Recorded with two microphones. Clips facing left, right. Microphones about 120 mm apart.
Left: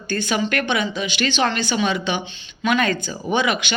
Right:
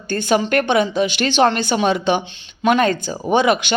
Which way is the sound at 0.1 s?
45° right (ahead or behind).